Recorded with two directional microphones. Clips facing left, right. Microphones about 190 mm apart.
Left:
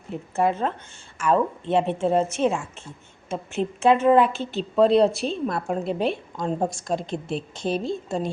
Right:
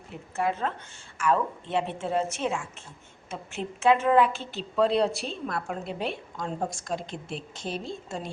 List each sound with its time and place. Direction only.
0.3 s speech: 25° left (ahead or behind)